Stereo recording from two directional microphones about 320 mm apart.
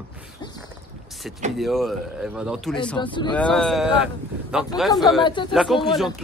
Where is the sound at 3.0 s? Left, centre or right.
Centre.